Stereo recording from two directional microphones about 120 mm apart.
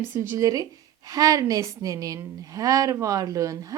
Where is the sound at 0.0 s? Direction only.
20° right (ahead or behind).